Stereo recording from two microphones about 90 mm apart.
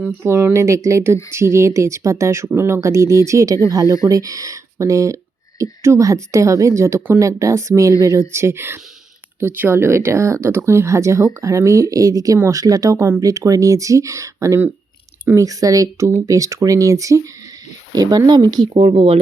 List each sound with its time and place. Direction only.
0.2 s speech: 30° right (ahead or behind); by 18.7 s 55° right (ahead or behind)
18.7 s speech: 90° right